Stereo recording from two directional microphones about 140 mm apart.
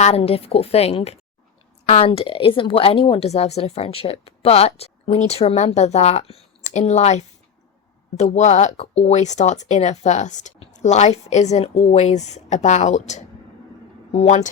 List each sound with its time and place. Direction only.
0.0 s a woman's voice: 45° left (ahead or behind)